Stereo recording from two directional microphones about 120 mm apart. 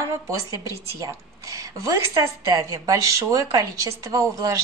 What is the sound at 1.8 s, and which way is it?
Speech, 30° right (ahead or behind).